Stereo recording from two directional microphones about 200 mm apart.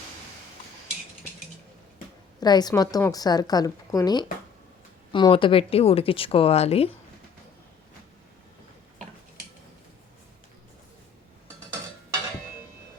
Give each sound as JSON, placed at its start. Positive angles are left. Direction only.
{"t": 2.4, "sound": "a woman's voice", "side_deg": 20}